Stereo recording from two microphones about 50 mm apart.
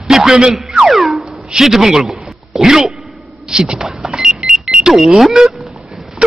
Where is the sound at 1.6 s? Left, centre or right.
Centre.